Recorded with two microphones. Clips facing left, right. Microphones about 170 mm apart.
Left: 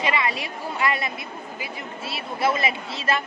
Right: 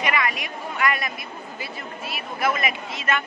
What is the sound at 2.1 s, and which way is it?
Speech, 30° left (ahead or behind).